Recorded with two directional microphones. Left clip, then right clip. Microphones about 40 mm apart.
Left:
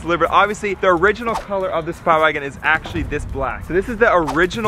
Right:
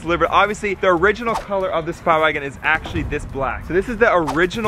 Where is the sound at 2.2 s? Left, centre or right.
Left.